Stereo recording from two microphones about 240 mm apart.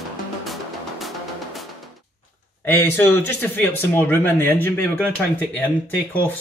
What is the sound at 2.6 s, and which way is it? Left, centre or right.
Speech, centre.